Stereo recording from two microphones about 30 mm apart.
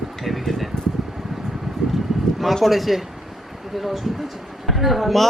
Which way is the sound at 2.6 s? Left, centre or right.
Centre.